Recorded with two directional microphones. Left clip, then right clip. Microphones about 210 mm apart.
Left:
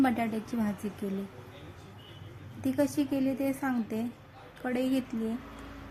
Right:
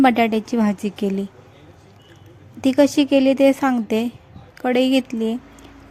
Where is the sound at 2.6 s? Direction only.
40° right (ahead or behind).